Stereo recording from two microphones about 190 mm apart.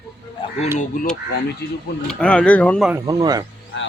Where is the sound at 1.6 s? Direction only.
60° left (ahead or behind).